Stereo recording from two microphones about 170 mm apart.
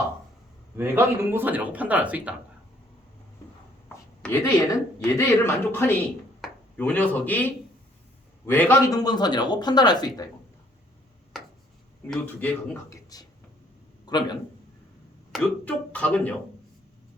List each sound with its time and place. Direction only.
0.8 s speech: 15° right (ahead or behind)
3.8 s a sound: 15° left (ahead or behind)
5.0 s a man's voice: 15° left (ahead or behind)
8.4 s a man's voice: 10° left (ahead or behind)
12.0 s a man's voice: 10° left (ahead or behind); by 14.3 s 25° left (ahead or behind)
15.3 s a man's voice: 5° left (ahead or behind)